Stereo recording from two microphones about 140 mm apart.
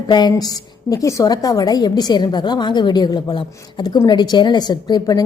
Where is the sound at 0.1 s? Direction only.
30° left (ahead or behind).